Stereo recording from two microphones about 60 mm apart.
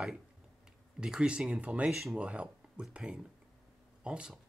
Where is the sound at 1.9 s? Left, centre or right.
Centre.